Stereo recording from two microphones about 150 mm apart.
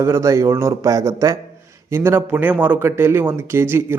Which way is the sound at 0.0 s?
20° right (ahead or behind).